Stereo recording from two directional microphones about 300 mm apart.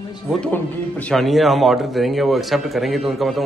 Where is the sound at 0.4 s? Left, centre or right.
Centre.